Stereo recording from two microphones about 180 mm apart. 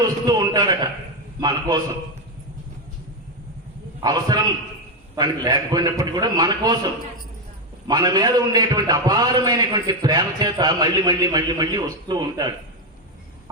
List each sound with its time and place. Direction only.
0.0 s a sound: 20° right (ahead or behind)
1.4 s a man's voice: 20° right (ahead or behind)
4.0 s a man's voice: 20° right (ahead or behind)
7.9 s a man's voice: 20° right (ahead or behind)